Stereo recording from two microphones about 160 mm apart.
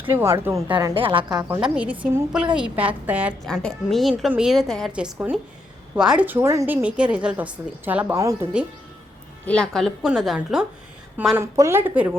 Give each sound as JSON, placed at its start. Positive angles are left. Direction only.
{"t": 0.0, "sound": "a woman's voice", "side_deg": -15}
{"t": 0.9, "sound": "a woman's voice", "side_deg": -35}
{"t": 1.5, "sound": "a woman's voice", "side_deg": -10}
{"t": 3.4, "sound": "a woman's voice", "side_deg": 5}
{"t": 9.5, "sound": "a woman's voice", "side_deg": 5}